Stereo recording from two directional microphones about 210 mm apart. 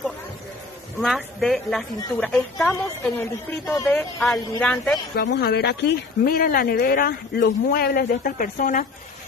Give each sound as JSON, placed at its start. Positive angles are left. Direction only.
{"t": 1.0, "sound": "a woman's voice", "side_deg": 0}
{"t": 5.1, "sound": "speech", "side_deg": 50}